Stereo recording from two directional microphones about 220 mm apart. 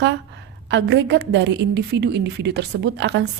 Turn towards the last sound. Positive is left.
turn(degrees=-50)  # may be behind; listen again after turning